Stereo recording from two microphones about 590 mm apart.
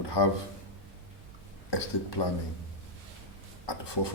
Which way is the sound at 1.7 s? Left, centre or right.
Left.